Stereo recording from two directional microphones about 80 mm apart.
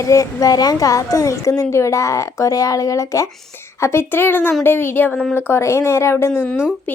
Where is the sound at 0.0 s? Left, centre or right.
Left.